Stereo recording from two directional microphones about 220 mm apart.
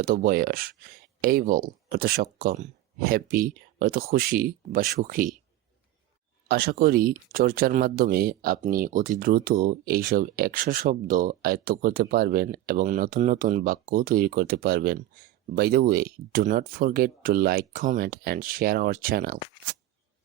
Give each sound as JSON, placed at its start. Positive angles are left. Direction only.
{"t": 0.0, "sound": "speech", "side_deg": -40}
{"t": 6.5, "sound": "speech", "side_deg": -45}